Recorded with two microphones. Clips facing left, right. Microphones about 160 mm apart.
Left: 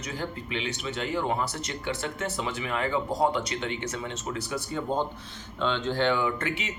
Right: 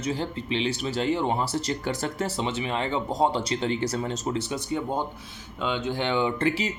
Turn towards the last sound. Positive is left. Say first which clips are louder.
# right 5 dB
turn(degrees=-35)  # may be behind; listen again after turning